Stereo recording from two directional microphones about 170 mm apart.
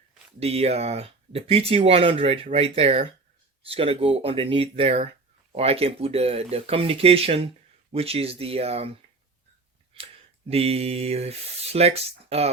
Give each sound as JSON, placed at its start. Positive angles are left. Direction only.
{"t": 0.3, "sound": "speech", "side_deg": -35}
{"t": 9.9, "sound": "a sound", "side_deg": -30}
{"t": 10.5, "sound": "speech", "side_deg": -35}